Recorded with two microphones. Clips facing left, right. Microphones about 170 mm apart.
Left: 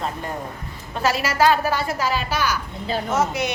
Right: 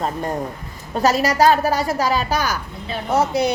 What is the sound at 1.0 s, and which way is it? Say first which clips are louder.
Speech: right 3 dB; 40° right (ahead or behind).